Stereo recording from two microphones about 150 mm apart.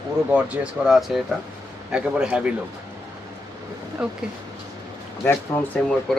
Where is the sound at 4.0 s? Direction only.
5° right (ahead or behind).